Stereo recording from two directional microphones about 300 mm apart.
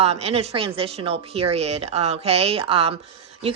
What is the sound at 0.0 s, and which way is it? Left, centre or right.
A woman's voice, right.